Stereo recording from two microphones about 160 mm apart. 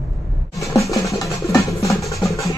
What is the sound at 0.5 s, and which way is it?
Music, 20° left (ahead or behind).